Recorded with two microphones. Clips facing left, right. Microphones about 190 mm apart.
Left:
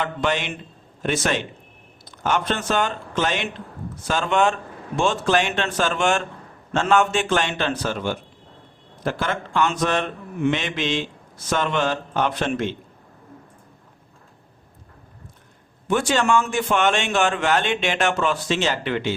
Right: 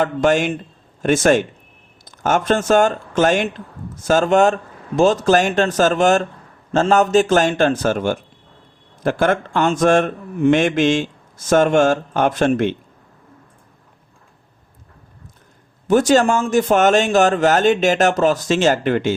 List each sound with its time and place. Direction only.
0.0 s speech: 45° right (ahead or behind)
15.9 s speech: 40° right (ahead or behind)